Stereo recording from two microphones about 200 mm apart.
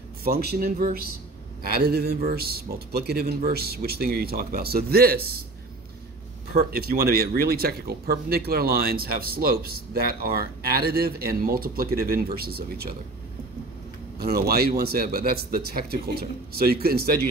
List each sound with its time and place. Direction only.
0.2 s speech: 50° right (ahead or behind)
6.5 s speech: 50° right (ahead or behind)
14.2 s speech: 50° right (ahead or behind)